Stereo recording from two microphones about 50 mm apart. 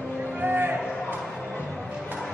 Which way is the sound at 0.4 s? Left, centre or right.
Right.